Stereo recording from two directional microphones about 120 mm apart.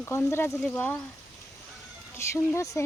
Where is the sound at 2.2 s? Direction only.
25° left (ahead or behind).